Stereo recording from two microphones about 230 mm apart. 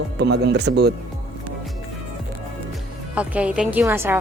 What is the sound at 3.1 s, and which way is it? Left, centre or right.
A woman's voice, centre.